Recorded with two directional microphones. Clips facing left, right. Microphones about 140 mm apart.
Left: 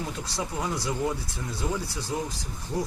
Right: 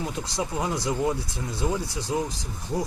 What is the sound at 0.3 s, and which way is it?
Speech, 20° right (ahead or behind).